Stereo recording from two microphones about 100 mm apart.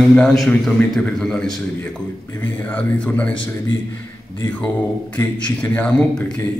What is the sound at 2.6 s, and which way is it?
Speech, 15° left (ahead or behind).